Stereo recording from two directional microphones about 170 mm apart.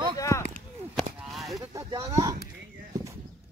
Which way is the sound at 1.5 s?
20° right (ahead or behind).